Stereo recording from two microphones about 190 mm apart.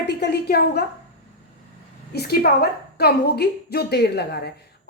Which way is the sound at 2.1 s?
55° left (ahead or behind).